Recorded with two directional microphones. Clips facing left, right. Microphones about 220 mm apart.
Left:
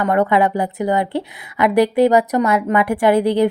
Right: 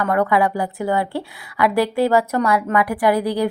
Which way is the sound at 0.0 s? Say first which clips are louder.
Left 2 dB; 25° left (ahead or behind).